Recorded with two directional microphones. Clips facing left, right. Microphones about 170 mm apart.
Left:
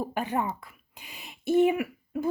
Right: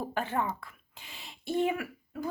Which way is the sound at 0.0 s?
15° left (ahead or behind).